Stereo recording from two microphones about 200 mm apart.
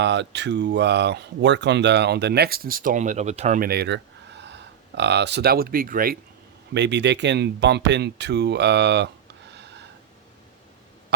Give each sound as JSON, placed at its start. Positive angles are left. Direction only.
{"t": 0.0, "sound": "speech", "side_deg": -60}
{"t": 6.7, "sound": "speech", "side_deg": -60}